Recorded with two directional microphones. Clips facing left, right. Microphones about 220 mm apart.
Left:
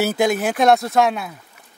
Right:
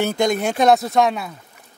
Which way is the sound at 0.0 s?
5° left (ahead or behind).